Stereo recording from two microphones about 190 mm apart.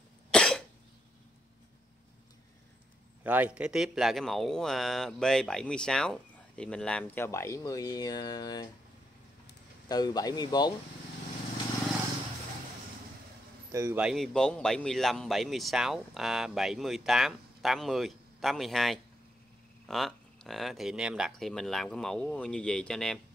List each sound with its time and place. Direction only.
0.3 s cough: 5° left (ahead or behind)
3.3 s speech: 10° right (ahead or behind); by 8.6 s 20° left (ahead or behind)
9.8 s speech: 20° left (ahead or behind)
13.7 s speech: 15° right (ahead or behind)
14.0 s speech: centre (ahead or behind)